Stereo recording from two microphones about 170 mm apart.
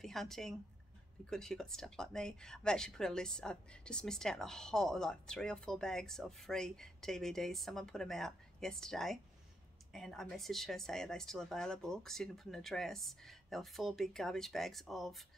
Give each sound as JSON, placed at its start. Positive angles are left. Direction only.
{"t": 0.0, "sound": "speech", "side_deg": 0}